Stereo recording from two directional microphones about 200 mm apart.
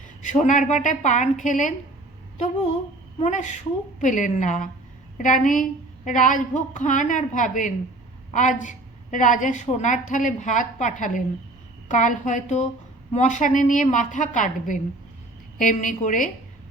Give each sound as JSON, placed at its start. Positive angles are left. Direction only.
{"t": 0.2, "sound": "a woman's voice", "side_deg": 40}
{"t": 3.2, "sound": "a woman's voice", "side_deg": 40}